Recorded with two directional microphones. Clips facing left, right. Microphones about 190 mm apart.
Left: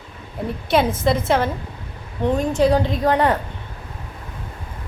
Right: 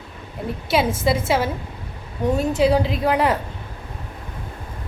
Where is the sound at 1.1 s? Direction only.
5° right (ahead or behind).